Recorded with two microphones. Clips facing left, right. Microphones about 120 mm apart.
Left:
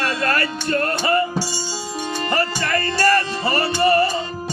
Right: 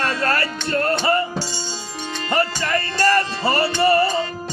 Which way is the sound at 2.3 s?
25° right (ahead or behind).